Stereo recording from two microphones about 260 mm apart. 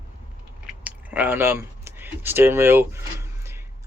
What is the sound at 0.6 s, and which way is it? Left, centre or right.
Speech, centre.